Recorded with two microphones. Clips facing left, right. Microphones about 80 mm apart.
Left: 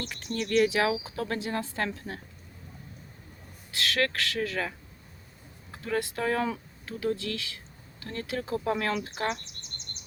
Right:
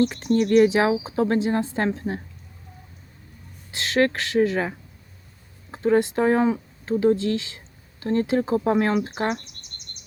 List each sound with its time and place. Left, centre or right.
0.0 s speech: right
3.7 s speech: right
5.7 s speech: right
9.4 s bird: left